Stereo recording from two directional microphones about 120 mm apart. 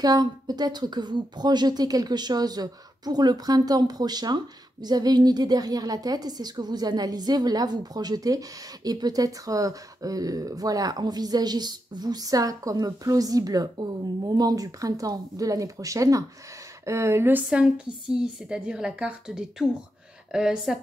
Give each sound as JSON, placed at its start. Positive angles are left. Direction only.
{"t": 0.0, "sound": "a woman's voice", "side_deg": -35}